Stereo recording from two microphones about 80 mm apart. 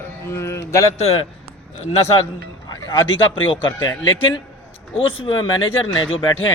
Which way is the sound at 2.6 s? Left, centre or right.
Left.